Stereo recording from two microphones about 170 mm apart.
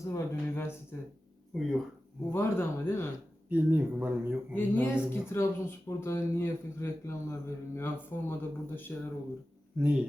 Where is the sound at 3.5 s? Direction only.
10° right (ahead or behind).